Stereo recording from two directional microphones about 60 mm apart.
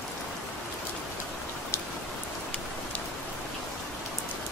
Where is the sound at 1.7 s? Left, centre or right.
Left.